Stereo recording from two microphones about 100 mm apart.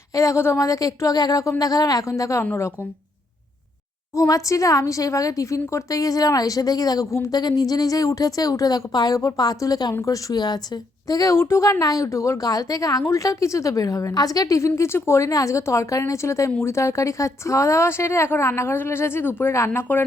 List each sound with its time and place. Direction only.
0.1 s speech: 30° left (ahead or behind)
4.1 s a woman's voice: 30° left (ahead or behind)
11.1 s a woman's voice: 35° left (ahead or behind)